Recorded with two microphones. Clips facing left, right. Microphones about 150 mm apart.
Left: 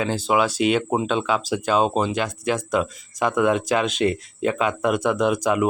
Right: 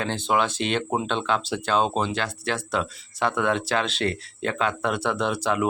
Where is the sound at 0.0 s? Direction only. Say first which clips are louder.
Left 3 dB; 5° left (ahead or behind).